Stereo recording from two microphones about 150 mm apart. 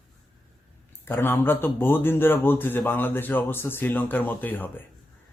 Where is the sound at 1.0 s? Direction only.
15° left (ahead or behind).